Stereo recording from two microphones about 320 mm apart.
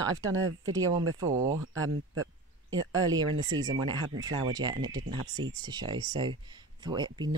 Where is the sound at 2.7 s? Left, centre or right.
Centre.